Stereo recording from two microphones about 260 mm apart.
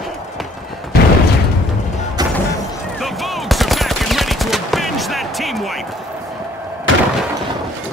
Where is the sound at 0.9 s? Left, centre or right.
Left.